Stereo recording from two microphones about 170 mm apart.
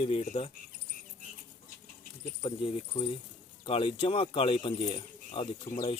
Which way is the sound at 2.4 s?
35° left (ahead or behind).